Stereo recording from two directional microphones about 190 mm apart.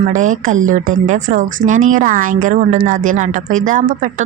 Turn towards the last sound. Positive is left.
turn(degrees=-45)  # may be behind; listen again after turning